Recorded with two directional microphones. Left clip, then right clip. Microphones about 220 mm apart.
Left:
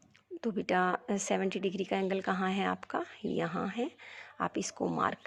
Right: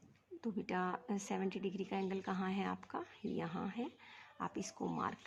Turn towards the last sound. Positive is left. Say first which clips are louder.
# left 9 dB
turn(degrees=25)  # may be behind; listen again after turning